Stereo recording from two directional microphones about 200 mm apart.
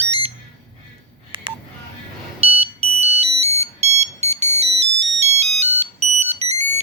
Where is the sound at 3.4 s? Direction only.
30° right (ahead or behind).